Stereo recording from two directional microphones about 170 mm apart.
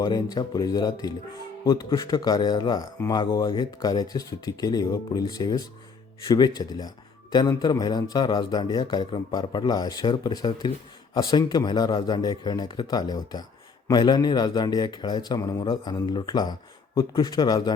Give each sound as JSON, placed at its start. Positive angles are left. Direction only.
{"t": 0.0, "sound": "speech", "side_deg": 25}